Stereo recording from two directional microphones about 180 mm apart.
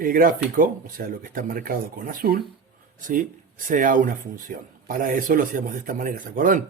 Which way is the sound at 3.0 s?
50° right (ahead or behind).